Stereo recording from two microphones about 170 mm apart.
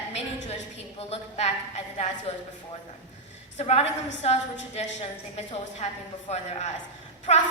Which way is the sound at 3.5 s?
40° left (ahead or behind).